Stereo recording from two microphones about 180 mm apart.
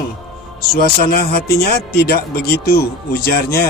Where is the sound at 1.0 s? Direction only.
55° left (ahead or behind).